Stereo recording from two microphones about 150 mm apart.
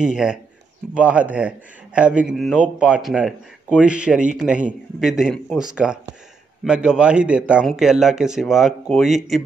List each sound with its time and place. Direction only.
0.0 s speech: 5° right (ahead or behind)